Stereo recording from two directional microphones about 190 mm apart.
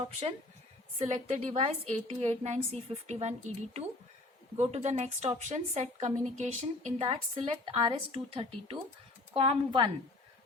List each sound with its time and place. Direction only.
0.9 s a woman's voice: 35° right (ahead or behind)